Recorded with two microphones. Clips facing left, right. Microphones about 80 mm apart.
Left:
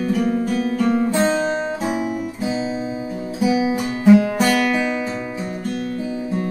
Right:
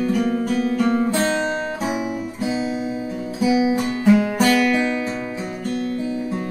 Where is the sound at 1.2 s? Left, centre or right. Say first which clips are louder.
Left 2 dB; centre.